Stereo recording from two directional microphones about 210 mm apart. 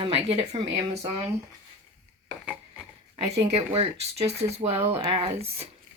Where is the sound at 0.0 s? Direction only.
30° right (ahead or behind).